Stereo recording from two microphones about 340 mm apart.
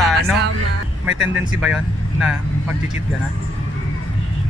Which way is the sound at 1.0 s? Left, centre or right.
Centre.